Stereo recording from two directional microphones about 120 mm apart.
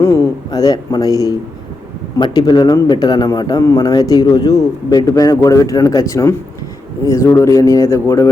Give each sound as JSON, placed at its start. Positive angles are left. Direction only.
{"t": 0.0, "sound": "a man's voice", "side_deg": 25}